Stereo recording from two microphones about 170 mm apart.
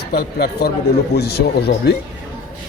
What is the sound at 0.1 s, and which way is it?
A man's voice, 65° left (ahead or behind).